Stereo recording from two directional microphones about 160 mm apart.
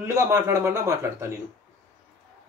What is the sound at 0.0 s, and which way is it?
Speech, 20° right (ahead or behind).